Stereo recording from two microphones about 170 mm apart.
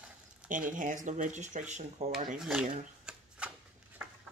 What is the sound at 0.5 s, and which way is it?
Speech, 50° right (ahead or behind).